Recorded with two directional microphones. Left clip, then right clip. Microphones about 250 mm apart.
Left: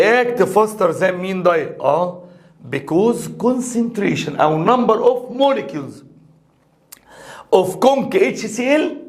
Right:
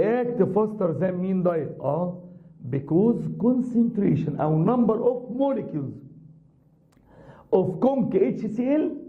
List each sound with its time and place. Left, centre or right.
0.0 s a man's voice: centre
3.5 s speech: centre
3.9 s a man's voice: centre
7.2 s a sound: centre
7.8 s a man's voice: centre